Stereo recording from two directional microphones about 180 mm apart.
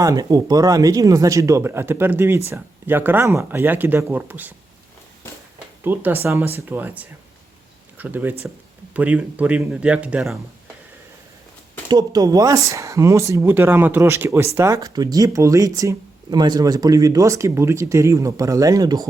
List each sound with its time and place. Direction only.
0.0 s speech: 20° right (ahead or behind)
5.8 s speech: 10° right (ahead or behind)
11.9 s speech: 20° right (ahead or behind)